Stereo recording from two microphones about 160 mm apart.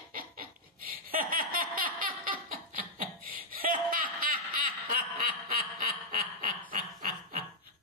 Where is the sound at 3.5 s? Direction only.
60° right (ahead or behind).